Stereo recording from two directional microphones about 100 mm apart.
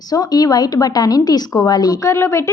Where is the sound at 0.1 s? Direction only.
40° left (ahead or behind).